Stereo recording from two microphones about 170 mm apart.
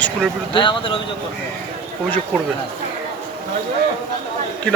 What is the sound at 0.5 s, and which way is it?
Speech, 30° left (ahead or behind).